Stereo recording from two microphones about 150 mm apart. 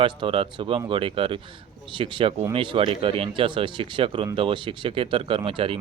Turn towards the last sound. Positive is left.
turn(degrees=-35)  # may be behind; listen again after turning